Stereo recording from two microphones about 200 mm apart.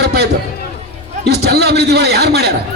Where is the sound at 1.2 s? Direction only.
55° right (ahead or behind).